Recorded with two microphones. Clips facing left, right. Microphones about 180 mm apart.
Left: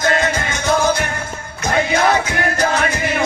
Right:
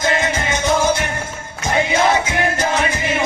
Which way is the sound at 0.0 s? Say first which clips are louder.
Left 1 dB; 20° right (ahead or behind).